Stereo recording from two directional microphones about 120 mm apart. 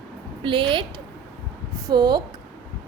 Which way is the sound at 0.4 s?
45° right (ahead or behind).